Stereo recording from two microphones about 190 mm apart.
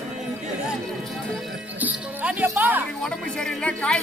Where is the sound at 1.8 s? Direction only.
10° right (ahead or behind).